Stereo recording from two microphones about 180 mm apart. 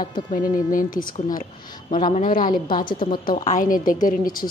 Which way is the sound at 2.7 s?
25° left (ahead or behind).